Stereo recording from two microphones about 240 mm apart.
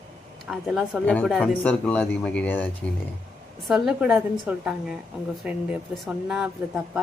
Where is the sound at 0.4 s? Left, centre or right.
Centre.